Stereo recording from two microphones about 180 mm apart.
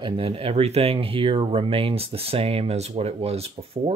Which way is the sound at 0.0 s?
30° right (ahead or behind).